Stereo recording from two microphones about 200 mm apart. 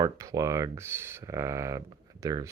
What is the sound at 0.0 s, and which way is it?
Speech, 15° right (ahead or behind).